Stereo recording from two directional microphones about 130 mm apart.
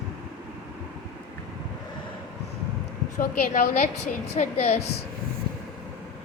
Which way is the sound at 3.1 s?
80° left.